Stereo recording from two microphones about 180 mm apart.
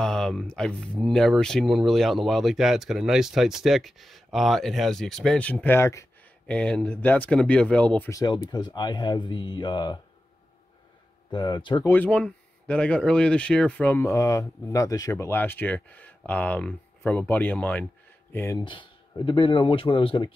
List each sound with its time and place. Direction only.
0.0 s speech: 5° left (ahead or behind)
8.1 s speech: 20° left (ahead or behind)
11.2 s speech: 25° left (ahead or behind)
11.9 s speech: 10° left (ahead or behind)
18.6 s speech: 25° left (ahead or behind)